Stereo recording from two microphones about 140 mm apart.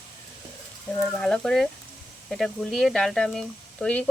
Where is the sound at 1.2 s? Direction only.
5° left (ahead or behind).